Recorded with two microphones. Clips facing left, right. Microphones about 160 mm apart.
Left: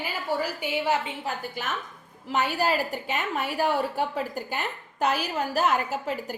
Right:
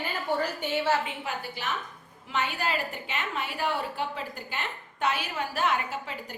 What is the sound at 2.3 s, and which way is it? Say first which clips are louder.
A woman's voice: left 5 dB; 40° left (ahead or behind).